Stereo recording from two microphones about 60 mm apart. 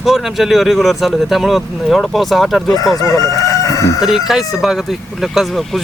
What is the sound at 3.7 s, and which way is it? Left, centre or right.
Chicken, left.